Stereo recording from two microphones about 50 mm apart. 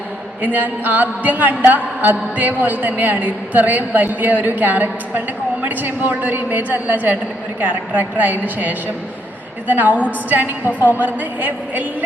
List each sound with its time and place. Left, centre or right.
0.4 s speech: right